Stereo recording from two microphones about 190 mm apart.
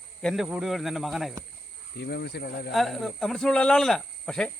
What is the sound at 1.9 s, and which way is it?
Speech, 60° left (ahead or behind).